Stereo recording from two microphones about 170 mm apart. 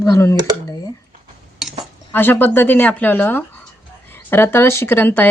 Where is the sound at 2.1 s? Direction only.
10° left (ahead or behind).